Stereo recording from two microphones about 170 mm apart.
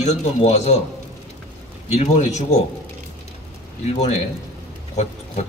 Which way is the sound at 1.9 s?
40° left (ahead or behind).